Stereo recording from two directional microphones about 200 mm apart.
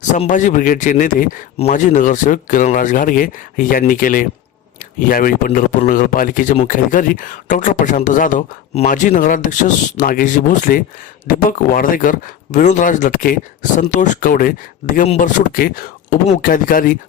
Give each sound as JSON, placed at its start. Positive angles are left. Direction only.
{"t": 0.1, "sound": "speech", "side_deg": 40}